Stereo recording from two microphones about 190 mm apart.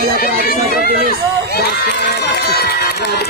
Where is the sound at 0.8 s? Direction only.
55° right (ahead or behind).